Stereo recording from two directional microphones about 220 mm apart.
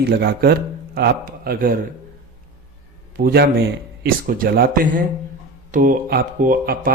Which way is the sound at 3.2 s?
45° right (ahead or behind).